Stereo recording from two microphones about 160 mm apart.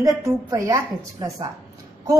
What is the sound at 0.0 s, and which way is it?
A woman's voice, 20° right (ahead or behind).